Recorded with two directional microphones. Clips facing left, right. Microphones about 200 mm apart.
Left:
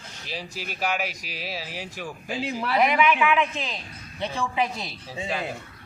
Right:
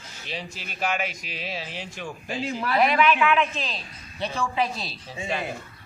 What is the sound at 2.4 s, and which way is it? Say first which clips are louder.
A man's voice: even; 15° left (ahead or behind).